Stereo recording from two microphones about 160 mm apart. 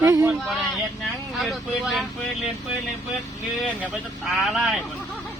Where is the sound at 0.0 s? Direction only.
20° right (ahead or behind).